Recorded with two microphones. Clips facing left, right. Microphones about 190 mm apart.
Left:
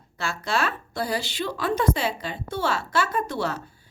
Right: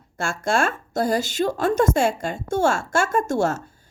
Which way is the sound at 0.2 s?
50° right (ahead or behind).